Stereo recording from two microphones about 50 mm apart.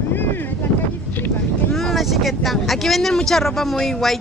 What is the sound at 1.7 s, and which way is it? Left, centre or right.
Speech, centre.